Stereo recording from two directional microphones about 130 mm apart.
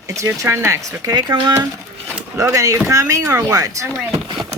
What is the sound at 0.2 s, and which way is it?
Speech, 20° right (ahead or behind).